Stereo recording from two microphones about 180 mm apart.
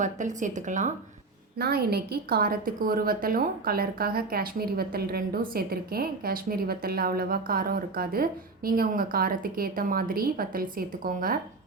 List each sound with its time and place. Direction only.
0.0 s speech: 45° right (ahead or behind)
1.5 s a woman's voice: 60° right (ahead or behind)